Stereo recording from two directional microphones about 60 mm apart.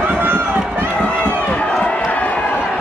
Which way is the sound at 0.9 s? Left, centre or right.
Centre.